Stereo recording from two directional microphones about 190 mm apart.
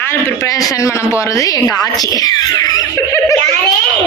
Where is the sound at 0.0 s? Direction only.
15° left (ahead or behind).